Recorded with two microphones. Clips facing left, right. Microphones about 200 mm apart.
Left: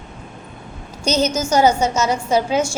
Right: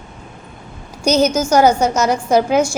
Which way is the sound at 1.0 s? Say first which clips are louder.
Right 4 dB; 10° right (ahead or behind).